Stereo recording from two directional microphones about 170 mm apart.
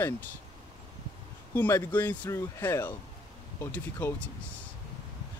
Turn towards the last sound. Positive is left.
turn(degrees=10)  # may be behind; listen again after turning